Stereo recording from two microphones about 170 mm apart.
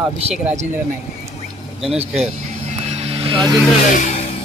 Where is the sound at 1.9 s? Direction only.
40° right (ahead or behind).